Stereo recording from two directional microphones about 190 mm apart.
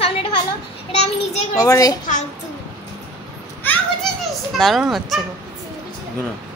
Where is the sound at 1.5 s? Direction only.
20° left (ahead or behind).